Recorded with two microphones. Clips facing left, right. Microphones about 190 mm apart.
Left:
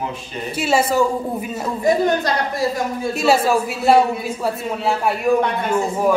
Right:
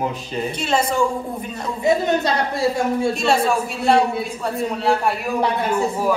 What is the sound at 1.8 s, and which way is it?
Speech, 25° right (ahead or behind).